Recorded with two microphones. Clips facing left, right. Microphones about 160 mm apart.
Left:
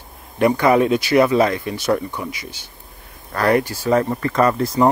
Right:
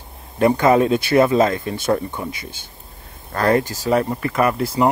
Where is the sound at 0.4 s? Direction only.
25° right (ahead or behind).